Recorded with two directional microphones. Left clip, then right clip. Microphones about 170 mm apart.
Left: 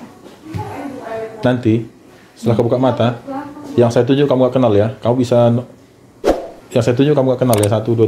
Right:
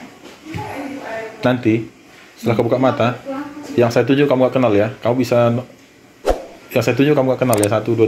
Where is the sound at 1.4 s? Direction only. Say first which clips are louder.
Left 1 dB; 10° left (ahead or behind).